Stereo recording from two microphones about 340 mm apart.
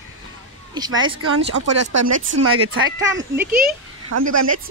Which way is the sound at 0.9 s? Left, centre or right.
Right.